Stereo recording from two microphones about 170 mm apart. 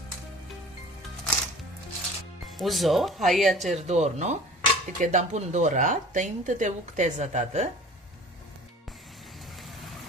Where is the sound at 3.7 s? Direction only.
40° right (ahead or behind).